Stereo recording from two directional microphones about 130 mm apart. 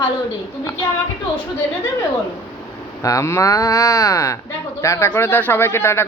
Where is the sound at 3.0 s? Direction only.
25° left (ahead or behind).